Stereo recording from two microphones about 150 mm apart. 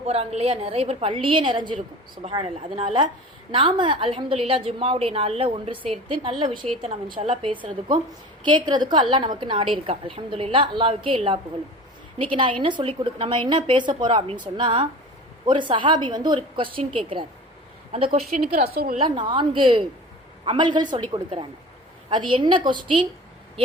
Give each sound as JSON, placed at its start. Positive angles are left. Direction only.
{"t": 0.0, "sound": "a woman's voice", "side_deg": -45}
{"t": 18.7, "sound": "a woman's voice", "side_deg": -90}
{"t": 18.9, "sound": "a woman's voice", "side_deg": -30}